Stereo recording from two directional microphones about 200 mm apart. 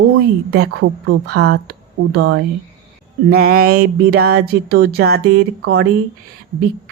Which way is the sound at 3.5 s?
90° right.